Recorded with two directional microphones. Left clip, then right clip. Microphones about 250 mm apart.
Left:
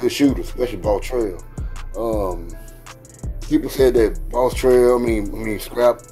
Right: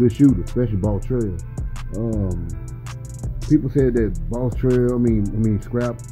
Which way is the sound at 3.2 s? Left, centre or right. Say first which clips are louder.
Right 1 dB; centre.